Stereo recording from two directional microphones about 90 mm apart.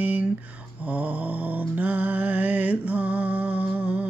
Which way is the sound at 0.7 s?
15° right (ahead or behind).